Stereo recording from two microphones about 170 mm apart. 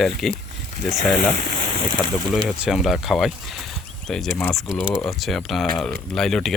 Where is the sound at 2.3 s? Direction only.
Centre (ahead or behind).